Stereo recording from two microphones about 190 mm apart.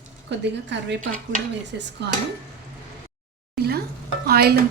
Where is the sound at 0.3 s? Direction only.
65° right (ahead or behind).